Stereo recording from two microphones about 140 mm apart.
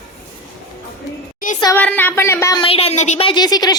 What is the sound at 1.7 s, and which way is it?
Speech, 15° left (ahead or behind).